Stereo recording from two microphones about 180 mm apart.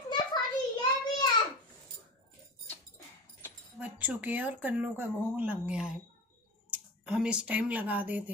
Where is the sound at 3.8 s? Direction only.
10° right (ahead or behind).